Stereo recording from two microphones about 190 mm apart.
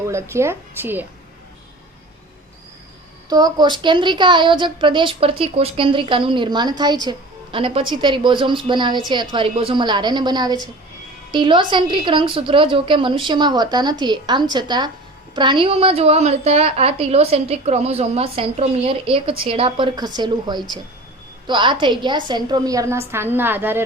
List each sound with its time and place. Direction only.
0.1 s a woman's voice: 15° right (ahead or behind)
3.2 s a woman's voice: 20° right (ahead or behind)